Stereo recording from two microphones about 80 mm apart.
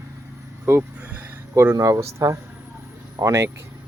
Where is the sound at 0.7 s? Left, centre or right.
Right.